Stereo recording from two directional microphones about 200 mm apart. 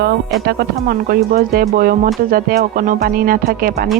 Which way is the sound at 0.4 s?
50° right (ahead or behind).